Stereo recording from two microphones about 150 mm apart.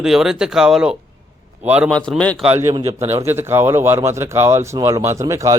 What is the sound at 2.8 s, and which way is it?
Speech, 40° right (ahead or behind).